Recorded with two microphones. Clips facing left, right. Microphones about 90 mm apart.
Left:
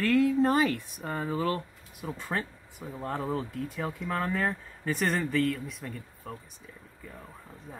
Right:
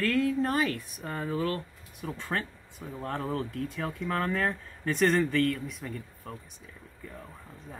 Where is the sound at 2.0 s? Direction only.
5° left (ahead or behind).